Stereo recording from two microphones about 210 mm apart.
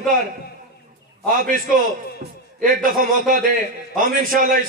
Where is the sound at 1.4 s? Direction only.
40° right (ahead or behind).